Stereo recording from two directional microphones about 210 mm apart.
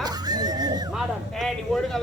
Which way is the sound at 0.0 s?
20° right (ahead or behind).